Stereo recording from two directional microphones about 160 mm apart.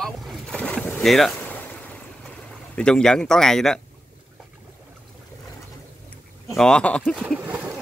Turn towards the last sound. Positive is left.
turn(degrees=-10)  # may be behind; listen again after turning